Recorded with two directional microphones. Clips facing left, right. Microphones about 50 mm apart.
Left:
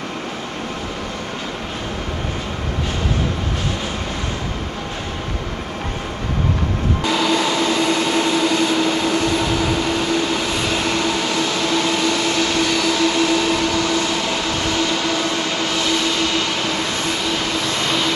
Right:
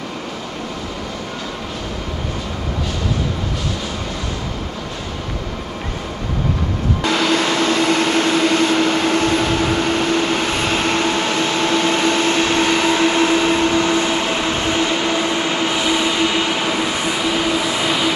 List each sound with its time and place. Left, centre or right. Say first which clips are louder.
7.1 s vehicle: right 1 dB; right; by 18.1 s centre